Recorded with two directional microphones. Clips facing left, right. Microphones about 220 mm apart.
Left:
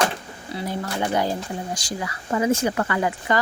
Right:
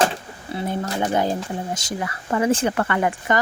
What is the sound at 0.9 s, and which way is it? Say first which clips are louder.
Speech: right 1 dB; 20° right (ahead or behind).